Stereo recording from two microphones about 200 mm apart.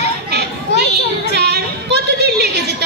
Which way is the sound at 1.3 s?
55° right (ahead or behind).